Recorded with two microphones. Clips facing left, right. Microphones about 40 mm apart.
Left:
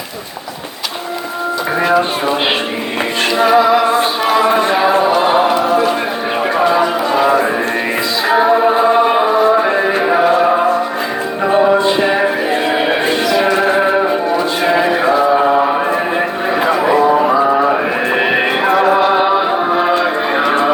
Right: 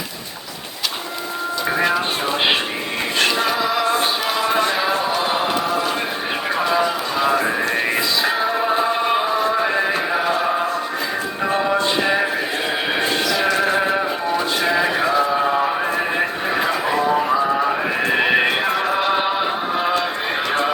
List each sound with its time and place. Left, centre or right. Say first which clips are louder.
1.8 s a sound: left 7 dB; centre
3.5 s music: left 10 dB; left
4.3 s a sound: left 8 dB; left
4.9 s chant: left 8 dB; left
5.3 s music: left 8 dB; centre
6.6 s a sound: left 6 dB; left
8.5 s chant: left 8 dB; centre
9.2 s music: left 7 dB; left
9.6 s music: left 6 dB; centre; by 14.8 s left
15.4 s a sound: left 6 dB; left
18.7 s music: left 9 dB; left
18.9 s music: left 7 dB; centre